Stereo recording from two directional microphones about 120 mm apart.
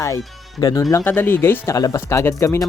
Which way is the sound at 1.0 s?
15° left (ahead or behind).